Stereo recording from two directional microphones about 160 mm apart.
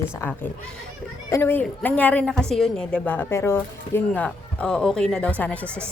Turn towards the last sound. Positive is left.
turn(degrees=10)  # may be behind; listen again after turning